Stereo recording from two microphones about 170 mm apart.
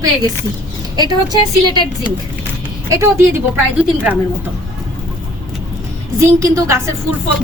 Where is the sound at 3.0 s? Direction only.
15° right (ahead or behind).